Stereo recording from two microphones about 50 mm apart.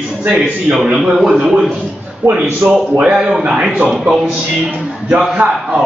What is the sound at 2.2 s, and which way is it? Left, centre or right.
Speech, right.